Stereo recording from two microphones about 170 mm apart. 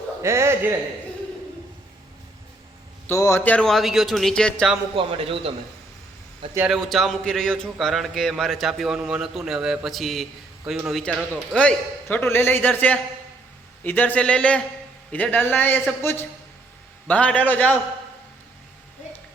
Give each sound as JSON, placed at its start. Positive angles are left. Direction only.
{"t": 0.2, "sound": "a man's voice", "side_deg": -15}
{"t": 3.1, "sound": "speech", "side_deg": 15}
{"t": 4.9, "sound": "a man's voice", "side_deg": -35}
{"t": 6.7, "sound": "a man's voice", "side_deg": 0}